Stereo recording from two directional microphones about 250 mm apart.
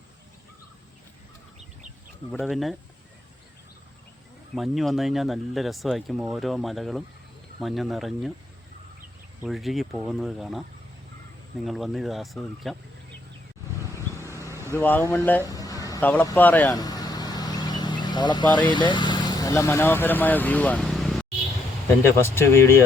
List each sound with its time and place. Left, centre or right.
2.3 s speech: centre
4.5 s speech: centre
9.4 s speech: centre
11.6 s speech: centre
14.3 s vehicle: centre
14.7 s a sound: centre
18.7 s speech: centre